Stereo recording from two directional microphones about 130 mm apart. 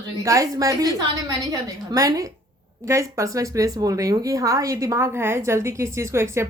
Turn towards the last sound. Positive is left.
turn(degrees=-20)  # may be behind; listen again after turning